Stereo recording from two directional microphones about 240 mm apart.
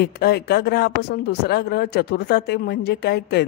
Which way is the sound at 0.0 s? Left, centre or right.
Left.